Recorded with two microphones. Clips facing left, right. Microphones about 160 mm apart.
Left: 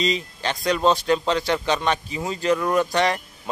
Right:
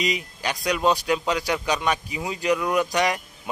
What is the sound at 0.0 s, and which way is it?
Speech, 10° right (ahead or behind).